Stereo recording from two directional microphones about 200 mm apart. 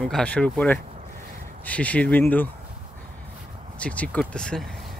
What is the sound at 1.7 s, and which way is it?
Speech, 5° left (ahead or behind).